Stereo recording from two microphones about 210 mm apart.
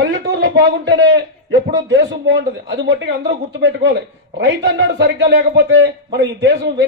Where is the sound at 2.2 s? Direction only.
60° right (ahead or behind).